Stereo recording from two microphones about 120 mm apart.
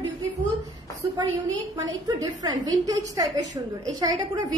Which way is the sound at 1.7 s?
35° right (ahead or behind).